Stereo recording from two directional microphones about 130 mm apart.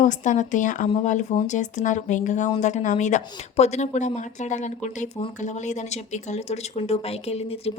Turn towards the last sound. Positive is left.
turn(degrees=50)  # may be behind; listen again after turning